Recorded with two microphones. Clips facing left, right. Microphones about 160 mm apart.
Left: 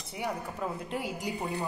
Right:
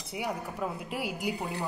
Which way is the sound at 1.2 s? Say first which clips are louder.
Even; centre (ahead or behind).